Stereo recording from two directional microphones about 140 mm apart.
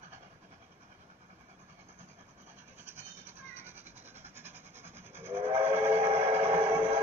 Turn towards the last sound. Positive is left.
turn(degrees=-45)  # may be behind; listen again after turning